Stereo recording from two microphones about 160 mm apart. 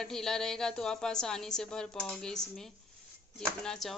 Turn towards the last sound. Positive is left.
turn(degrees=5)  # may be behind; listen again after turning